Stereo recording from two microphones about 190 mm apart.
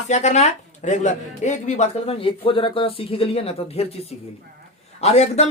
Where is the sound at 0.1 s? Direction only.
35° left (ahead or behind).